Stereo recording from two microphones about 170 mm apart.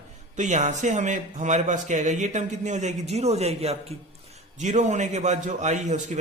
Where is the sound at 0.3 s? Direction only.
45° right (ahead or behind).